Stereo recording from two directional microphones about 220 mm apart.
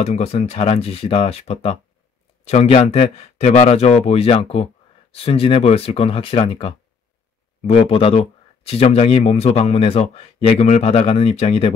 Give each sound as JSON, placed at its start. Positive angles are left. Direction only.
{"t": 0.0, "sound": "speech", "side_deg": 30}